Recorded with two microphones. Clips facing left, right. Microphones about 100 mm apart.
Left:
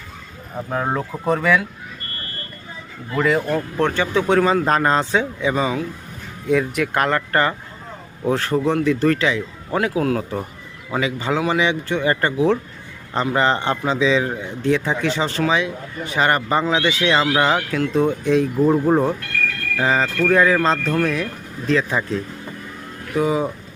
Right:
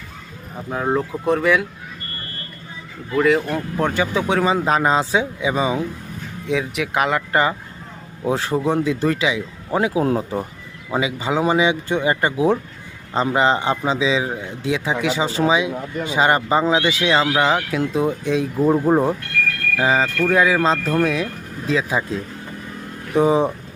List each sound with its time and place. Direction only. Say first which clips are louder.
1.3 s speech: right 1 dB; centre (ahead or behind)
3.2 s a man's voice: right 1 dB; 5° right (ahead or behind)
6.5 s a man's voice: left 3 dB; centre (ahead or behind)
9.7 s a man's voice: right 1 dB; 20° right (ahead or behind)
17.1 s a man's voice: even; 5° right (ahead or behind)
23.1 s speech: right 4 dB; 25° right (ahead or behind)